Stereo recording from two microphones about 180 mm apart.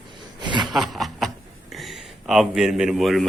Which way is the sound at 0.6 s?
Centre (ahead or behind).